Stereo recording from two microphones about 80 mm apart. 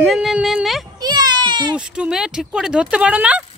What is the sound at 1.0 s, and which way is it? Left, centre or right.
Speech, right.